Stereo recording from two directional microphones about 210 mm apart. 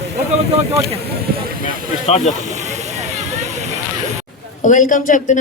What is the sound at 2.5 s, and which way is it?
Snake, 35° right (ahead or behind).